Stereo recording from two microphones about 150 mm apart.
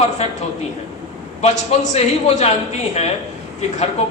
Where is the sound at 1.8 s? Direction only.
45° left (ahead or behind).